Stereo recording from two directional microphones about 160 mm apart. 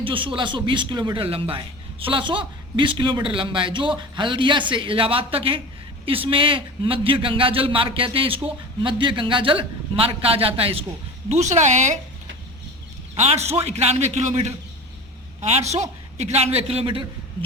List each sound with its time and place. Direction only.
0.0 s a man's voice: 30° right (ahead or behind); by 11.9 s 50° right (ahead or behind)
13.1 s a man's voice: 40° right (ahead or behind)